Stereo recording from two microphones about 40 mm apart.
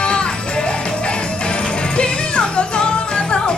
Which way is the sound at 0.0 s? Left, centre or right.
Left.